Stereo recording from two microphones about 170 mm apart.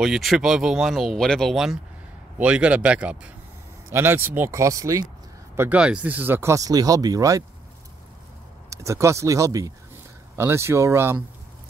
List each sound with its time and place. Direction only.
0.0 s speech: centre (ahead or behind); by 5.1 s 20° right (ahead or behind)
5.6 s speech: 5° right (ahead or behind)
8.6 s speech: 15° right (ahead or behind)